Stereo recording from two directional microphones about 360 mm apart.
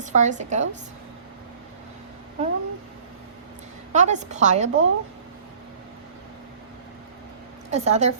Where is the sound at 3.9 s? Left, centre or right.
Centre.